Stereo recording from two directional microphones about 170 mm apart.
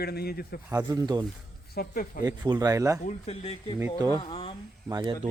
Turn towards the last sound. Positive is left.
turn(degrees=-30)  # may be behind; listen again after turning